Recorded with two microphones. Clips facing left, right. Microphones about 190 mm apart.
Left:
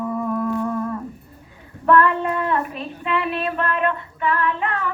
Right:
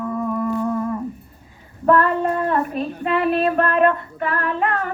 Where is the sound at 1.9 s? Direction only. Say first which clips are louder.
Even; 40° right (ahead or behind).